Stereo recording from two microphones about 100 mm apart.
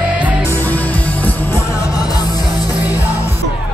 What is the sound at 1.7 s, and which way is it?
Music, 35° left (ahead or behind).